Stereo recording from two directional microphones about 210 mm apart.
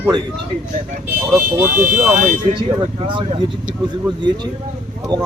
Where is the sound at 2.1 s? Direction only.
35° right (ahead or behind).